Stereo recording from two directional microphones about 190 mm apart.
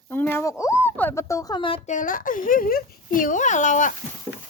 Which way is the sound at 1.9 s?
45° left (ahead or behind).